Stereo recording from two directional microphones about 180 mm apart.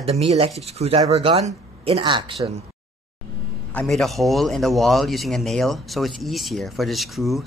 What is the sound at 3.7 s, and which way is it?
A man's voice, 5° left (ahead or behind).